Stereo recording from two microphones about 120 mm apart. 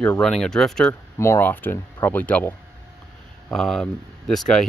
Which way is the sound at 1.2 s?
20° left (ahead or behind).